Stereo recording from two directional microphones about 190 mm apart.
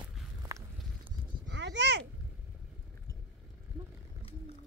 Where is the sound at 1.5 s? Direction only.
70° right (ahead or behind).